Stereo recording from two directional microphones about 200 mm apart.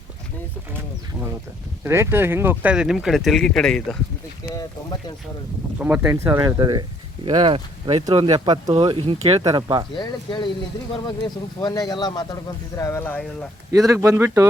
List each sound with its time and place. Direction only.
1.8 s speech: 10° right (ahead or behind)
4.5 s speech: 20° left (ahead or behind)
5.8 s speech: 10° right (ahead or behind)
9.9 s speech: 20° left (ahead or behind)
13.7 s speech: 15° right (ahead or behind)